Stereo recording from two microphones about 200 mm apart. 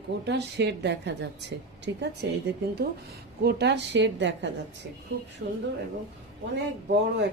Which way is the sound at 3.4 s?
55° right (ahead or behind).